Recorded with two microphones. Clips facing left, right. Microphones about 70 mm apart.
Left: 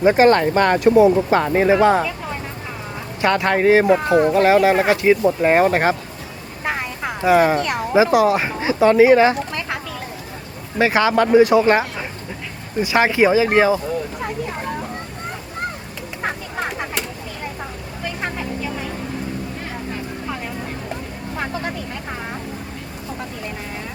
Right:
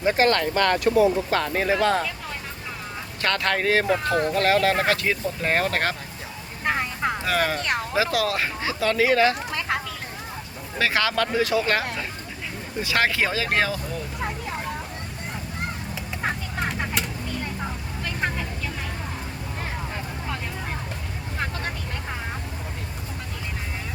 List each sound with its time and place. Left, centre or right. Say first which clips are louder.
0.0 s speech: left 7 dB; left
3.2 s speech: left 7 dB; centre
6.7 s vehicle: even; centre
7.2 s speech: left 13 dB; centre
10.8 s speech: left 7 dB; left
16.2 s a sound: left 3 dB; centre
18.2 s vehicle: left 2 dB; centre